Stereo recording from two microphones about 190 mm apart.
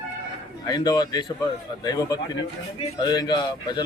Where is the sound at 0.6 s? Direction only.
20° left (ahead or behind).